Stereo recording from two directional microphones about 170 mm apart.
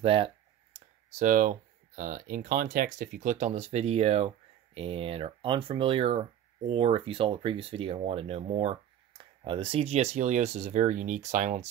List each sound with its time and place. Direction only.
0.0 s speech: 30° right (ahead or behind)
0.7 s speech: 45° right (ahead or behind)